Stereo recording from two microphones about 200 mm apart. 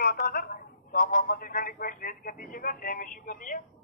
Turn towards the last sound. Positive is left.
turn(degrees=45)  # may be behind; listen again after turning